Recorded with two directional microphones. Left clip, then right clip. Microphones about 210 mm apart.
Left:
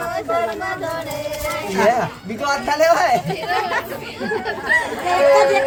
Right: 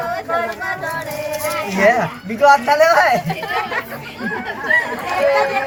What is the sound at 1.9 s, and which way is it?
Speech, 15° right (ahead or behind).